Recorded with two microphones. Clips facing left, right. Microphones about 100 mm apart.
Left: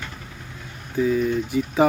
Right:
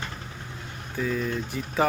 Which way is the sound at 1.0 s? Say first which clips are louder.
Left 7 dB; 10° left (ahead or behind).